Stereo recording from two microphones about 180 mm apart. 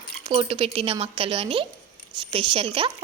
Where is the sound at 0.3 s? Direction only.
30° right (ahead or behind).